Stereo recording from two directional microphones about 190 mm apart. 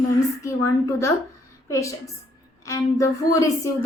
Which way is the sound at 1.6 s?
15° left (ahead or behind).